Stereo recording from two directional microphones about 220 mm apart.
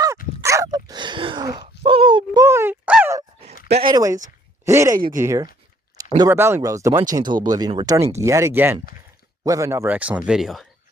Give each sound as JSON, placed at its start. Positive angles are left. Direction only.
{"t": 0.4, "sound": "dog", "side_deg": -15}
{"t": 3.8, "sound": "speech", "side_deg": -20}